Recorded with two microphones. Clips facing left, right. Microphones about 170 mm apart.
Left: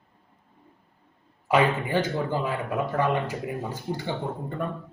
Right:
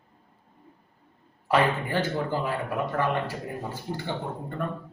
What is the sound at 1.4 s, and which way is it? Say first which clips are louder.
A man's voice: left 1 dB; 15° left (ahead or behind).